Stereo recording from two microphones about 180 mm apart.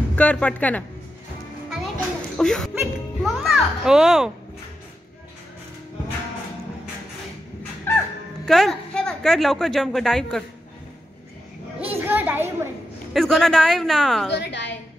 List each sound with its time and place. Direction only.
0.1 s a woman's voice: 10° left (ahead or behind)
2.3 s a child's voice: 5° left (ahead or behind)
7.9 s music: 10° left (ahead or behind)
8.5 s a woman's voice: centre (ahead or behind)
12.0 s a sound: 10° right (ahead or behind)
13.1 s a woman's voice: centre (ahead or behind)
14.3 s a woman's voice: 75° left (ahead or behind)